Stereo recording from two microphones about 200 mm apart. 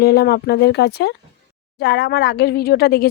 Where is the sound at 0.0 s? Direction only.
55° left (ahead or behind).